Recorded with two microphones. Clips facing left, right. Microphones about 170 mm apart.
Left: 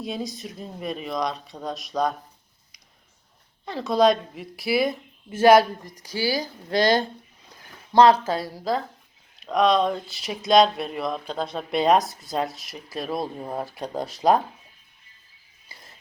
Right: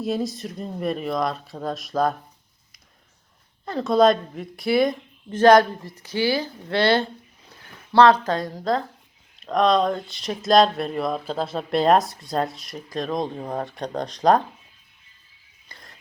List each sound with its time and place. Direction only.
0.0 s speech: centre (ahead or behind)
3.7 s speech: centre (ahead or behind)
6.1 s speech: 35° left (ahead or behind)
7.9 s a woman's voice: 10° left (ahead or behind)
15.7 s music: 5° left (ahead or behind)